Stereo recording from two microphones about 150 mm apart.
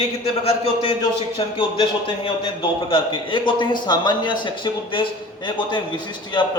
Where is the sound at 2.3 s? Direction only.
35° left (ahead or behind).